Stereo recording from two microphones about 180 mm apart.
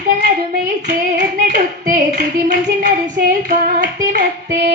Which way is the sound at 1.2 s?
55° right (ahead or behind).